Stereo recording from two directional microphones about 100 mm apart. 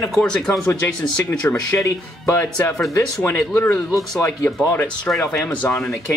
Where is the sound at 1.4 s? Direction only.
20° left (ahead or behind).